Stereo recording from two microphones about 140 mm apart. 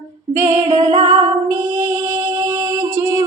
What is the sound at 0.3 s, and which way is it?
Music, 20° right (ahead or behind).